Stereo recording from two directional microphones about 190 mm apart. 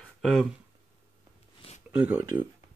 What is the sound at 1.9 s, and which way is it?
Speech, 10° right (ahead or behind).